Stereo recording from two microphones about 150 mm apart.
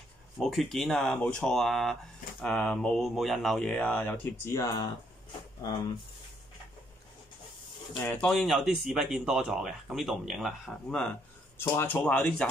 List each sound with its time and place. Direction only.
0.4 s speech: centre (ahead or behind); by 4.8 s 25° left (ahead or behind)
8.0 s speech: 10° left (ahead or behind)